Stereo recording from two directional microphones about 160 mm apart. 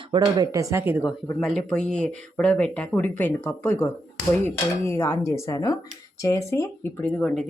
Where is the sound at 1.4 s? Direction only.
5° left (ahead or behind).